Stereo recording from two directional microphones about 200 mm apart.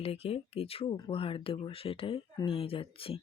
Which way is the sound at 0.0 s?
30° left (ahead or behind).